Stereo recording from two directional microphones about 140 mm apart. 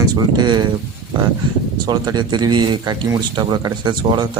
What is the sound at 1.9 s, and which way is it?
A man's voice, 30° right (ahead or behind).